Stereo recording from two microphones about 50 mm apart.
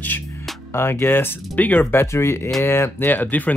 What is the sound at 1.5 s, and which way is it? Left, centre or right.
Speech, left.